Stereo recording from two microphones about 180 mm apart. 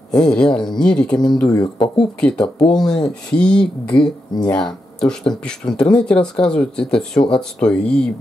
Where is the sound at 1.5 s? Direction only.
20° left (ahead or behind).